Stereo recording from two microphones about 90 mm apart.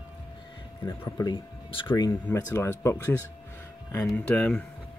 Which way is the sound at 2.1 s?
30° left (ahead or behind).